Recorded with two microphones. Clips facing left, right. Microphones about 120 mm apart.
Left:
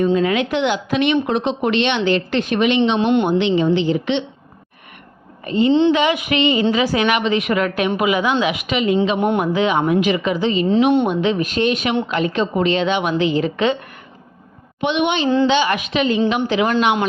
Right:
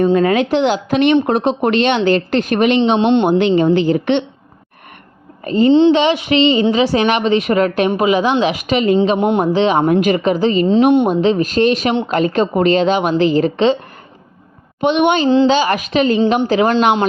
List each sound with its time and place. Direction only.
0.0 s speech: 45° right (ahead or behind)
5.5 s a woman's voice: 40° right (ahead or behind)
9.1 s speech: 20° right (ahead or behind)
9.4 s a woman's voice: 35° right (ahead or behind)
9.8 s a woman's voice: 50° right (ahead or behind)
14.8 s a woman's voice: 45° right (ahead or behind)